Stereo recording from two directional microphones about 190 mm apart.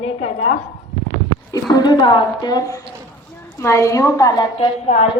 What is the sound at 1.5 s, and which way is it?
A woman's voice, 20° left (ahead or behind).